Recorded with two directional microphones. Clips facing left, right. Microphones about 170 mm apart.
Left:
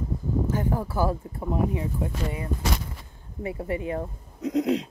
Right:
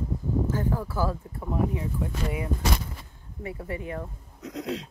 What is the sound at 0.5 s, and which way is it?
Speech, 15° left (ahead or behind).